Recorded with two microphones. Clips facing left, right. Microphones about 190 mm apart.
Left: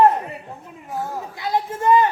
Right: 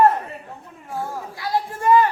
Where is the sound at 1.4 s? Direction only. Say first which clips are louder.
Left 1 dB; 20° left (ahead or behind).